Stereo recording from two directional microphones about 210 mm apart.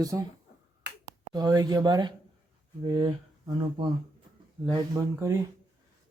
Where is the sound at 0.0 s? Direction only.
15° right (ahead or behind).